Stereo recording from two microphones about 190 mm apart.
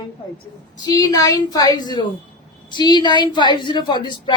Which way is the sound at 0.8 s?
20° left (ahead or behind).